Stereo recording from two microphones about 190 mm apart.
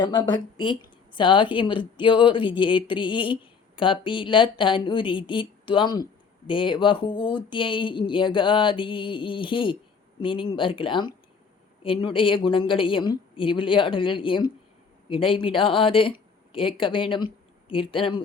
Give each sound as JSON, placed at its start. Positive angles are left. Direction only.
{"t": 0.0, "sound": "a woman's voice", "side_deg": 25}